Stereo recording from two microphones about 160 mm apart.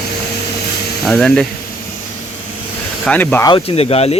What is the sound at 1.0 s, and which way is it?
Speech, 5° left (ahead or behind).